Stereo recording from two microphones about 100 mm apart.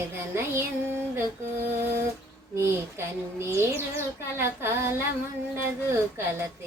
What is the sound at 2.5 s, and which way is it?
Speech, 25° right (ahead or behind).